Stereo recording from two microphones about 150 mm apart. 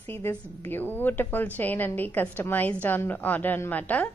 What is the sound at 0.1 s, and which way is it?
A woman's voice, 15° left (ahead or behind).